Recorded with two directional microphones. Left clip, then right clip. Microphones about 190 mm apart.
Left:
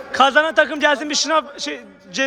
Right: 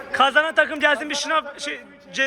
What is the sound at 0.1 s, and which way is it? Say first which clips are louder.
A man's voice: left 3 dB; 20° left (ahead or behind).